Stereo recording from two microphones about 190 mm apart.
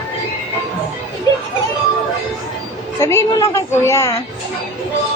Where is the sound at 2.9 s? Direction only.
15° left (ahead or behind).